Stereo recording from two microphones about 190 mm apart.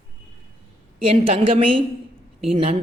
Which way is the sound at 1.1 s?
30° right (ahead or behind).